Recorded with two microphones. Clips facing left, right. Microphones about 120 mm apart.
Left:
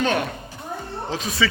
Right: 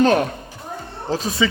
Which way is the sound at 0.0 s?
40° right (ahead or behind).